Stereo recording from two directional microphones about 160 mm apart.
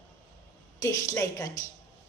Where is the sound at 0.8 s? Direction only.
20° left (ahead or behind).